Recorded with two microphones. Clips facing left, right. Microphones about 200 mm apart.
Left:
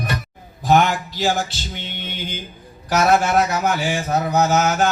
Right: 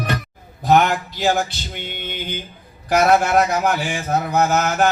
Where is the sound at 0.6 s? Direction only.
55° right (ahead or behind).